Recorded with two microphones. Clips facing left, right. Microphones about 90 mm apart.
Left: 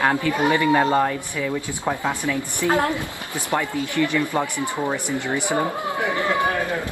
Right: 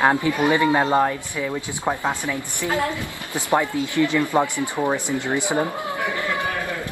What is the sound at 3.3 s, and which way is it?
A woman's voice, 20° right (ahead or behind).